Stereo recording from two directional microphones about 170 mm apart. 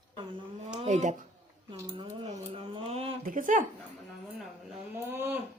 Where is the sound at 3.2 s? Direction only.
50° right (ahead or behind).